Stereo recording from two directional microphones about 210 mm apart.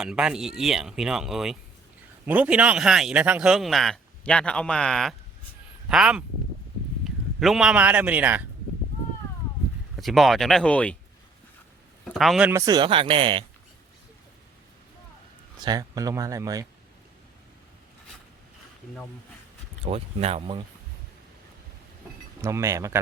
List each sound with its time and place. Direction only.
0.0 s speech: 5° right (ahead or behind)
7.3 s a man's voice: centre (ahead or behind)
10.0 s speech: centre (ahead or behind)
12.0 s a man's voice: centre (ahead or behind); by 13.4 s 25° right (ahead or behind)
15.6 s a man's voice: 20° right (ahead or behind)
19.8 s speech: 30° right (ahead or behind)
22.4 s a man's voice: 15° right (ahead or behind)